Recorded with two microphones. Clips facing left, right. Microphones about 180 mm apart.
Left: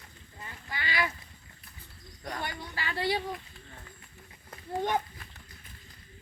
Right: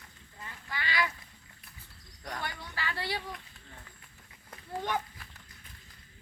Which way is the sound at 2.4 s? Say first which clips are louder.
Even; 20° left (ahead or behind).